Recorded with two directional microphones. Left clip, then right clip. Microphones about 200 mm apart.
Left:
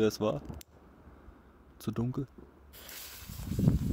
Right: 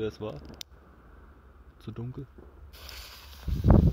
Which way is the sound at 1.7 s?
30° left (ahead or behind).